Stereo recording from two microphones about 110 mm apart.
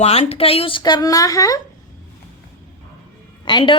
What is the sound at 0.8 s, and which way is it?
Speech, 35° left (ahead or behind).